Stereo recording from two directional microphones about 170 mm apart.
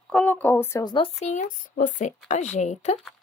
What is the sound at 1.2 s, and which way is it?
Speech, 45° left (ahead or behind).